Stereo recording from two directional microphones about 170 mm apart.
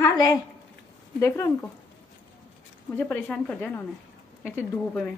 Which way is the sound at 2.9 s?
10° left (ahead or behind).